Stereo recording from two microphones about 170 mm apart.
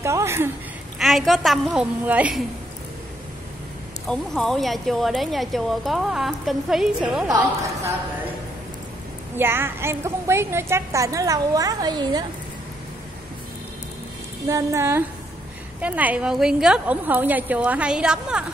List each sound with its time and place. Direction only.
0.0 s speech: 15° right (ahead or behind)
0.9 s speech: centre (ahead or behind)
4.1 s speech: 5° left (ahead or behind)
7.2 s a woman's voice: 20° right (ahead or behind)
9.4 s a woman's voice: 15° right (ahead or behind)
14.5 s a woman's voice: 15° right (ahead or behind)